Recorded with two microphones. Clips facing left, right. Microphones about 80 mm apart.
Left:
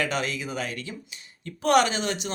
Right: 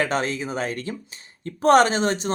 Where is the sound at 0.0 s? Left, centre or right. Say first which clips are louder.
Right 4 dB; right.